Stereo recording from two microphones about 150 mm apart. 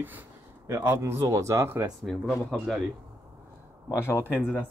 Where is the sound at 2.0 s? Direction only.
Centre (ahead or behind).